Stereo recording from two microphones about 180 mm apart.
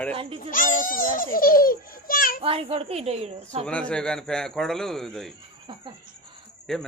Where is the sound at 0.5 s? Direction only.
50° left (ahead or behind).